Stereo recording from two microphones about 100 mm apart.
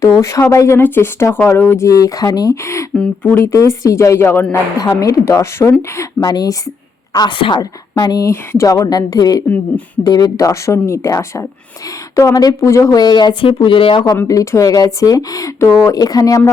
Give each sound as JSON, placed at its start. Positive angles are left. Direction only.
{"t": 0.0, "sound": "speech", "side_deg": 30}
{"t": 2.9, "sound": "speech", "side_deg": 10}
{"t": 3.3, "sound": "speech", "side_deg": 30}
{"t": 4.8, "sound": "speech", "side_deg": 35}
{"t": 6.3, "sound": "a woman's voice", "side_deg": 40}
{"t": 7.3, "sound": "a woman's voice", "side_deg": 60}
{"t": 7.6, "sound": "speech", "side_deg": 40}
{"t": 8.3, "sound": "speech", "side_deg": 30}
{"t": 9.5, "sound": "speech", "side_deg": 15}
{"t": 10.0, "sound": "speech", "side_deg": 45}
{"t": 14.3, "sound": "speech", "side_deg": 35}